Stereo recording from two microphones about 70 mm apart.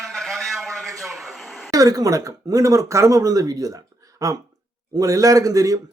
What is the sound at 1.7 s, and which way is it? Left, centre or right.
Speech, right.